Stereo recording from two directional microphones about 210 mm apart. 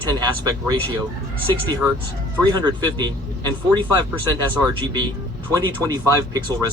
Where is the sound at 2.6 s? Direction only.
20° right (ahead or behind).